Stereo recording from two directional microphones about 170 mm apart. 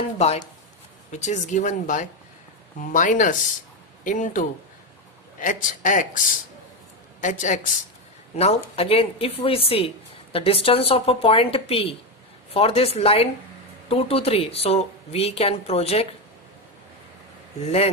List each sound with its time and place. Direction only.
1.1 s speech: 45° left (ahead or behind)
8.4 s a woman's voice: 35° left (ahead or behind)